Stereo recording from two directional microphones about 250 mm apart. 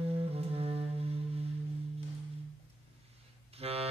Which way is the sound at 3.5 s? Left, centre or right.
Right.